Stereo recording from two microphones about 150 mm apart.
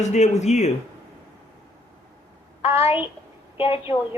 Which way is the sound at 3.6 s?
40° left (ahead or behind).